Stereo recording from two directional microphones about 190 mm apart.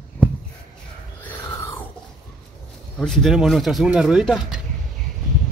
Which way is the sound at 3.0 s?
Centre (ahead or behind).